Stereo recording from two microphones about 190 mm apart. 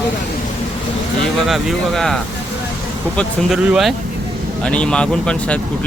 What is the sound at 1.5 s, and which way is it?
Speech, centre (ahead or behind).